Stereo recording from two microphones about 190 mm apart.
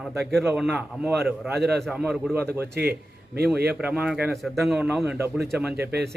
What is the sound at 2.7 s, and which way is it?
Speech, 55° right (ahead or behind).